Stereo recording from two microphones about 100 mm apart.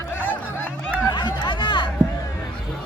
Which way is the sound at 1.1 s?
45° left (ahead or behind).